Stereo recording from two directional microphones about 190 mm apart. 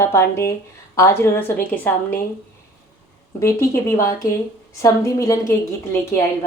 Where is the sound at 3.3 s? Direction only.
15° left (ahead or behind).